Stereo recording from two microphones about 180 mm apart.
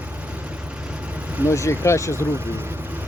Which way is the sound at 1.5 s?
15° left (ahead or behind).